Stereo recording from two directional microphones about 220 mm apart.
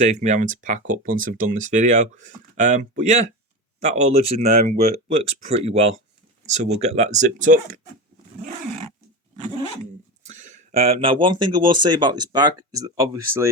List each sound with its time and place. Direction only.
0.0 s speech: 30° right (ahead or behind)
10.2 s speech: 35° right (ahead or behind); by 13.5 s 15° right (ahead or behind)